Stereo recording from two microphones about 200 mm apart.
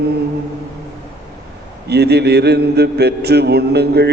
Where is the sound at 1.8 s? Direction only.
55° right (ahead or behind).